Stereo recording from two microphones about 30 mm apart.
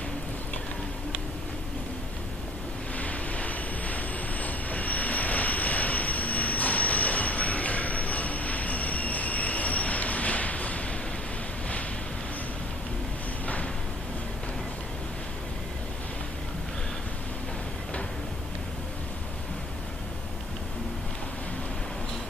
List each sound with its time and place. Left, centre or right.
3.0 s train: left